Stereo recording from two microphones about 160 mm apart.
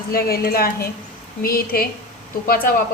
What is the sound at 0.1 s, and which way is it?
A woman's voice, 70° left (ahead or behind).